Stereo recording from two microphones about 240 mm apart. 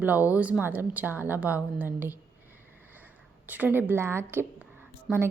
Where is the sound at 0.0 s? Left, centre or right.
Centre.